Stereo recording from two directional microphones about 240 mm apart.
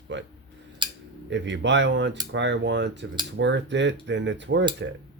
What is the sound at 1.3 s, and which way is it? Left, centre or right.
Speech, right.